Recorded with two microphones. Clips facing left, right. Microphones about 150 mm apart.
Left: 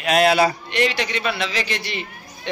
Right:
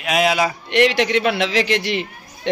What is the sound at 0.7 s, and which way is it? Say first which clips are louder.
A man's voice: right 6 dB; 75° right (ahead or behind).